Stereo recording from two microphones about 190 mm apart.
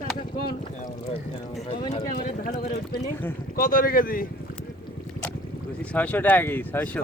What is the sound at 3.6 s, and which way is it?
Speech, 45° left (ahead or behind).